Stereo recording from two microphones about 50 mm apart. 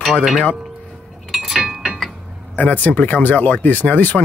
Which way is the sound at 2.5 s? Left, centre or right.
Left.